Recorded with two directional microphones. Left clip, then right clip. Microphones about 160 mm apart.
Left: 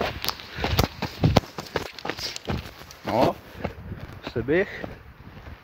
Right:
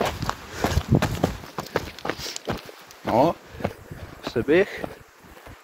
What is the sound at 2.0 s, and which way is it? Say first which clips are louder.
Walk: right 1 dB; 10° right (ahead or behind).